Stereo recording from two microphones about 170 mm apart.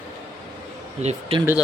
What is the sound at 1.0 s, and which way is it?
Speech, 40° right (ahead or behind).